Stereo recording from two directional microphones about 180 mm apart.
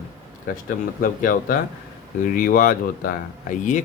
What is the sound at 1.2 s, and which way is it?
Speech, 50° left (ahead or behind).